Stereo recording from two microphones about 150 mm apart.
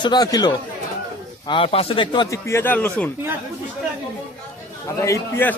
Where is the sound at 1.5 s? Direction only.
40° left (ahead or behind).